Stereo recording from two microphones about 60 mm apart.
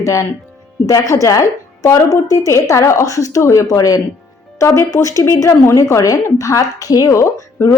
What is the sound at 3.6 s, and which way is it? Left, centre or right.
Speech, left.